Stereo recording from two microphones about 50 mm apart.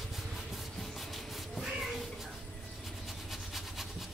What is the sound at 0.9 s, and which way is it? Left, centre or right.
Train, centre.